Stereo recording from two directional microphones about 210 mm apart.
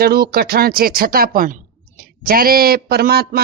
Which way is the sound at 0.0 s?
45° right (ahead or behind).